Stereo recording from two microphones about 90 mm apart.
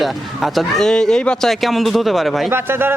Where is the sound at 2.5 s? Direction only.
25° right (ahead or behind).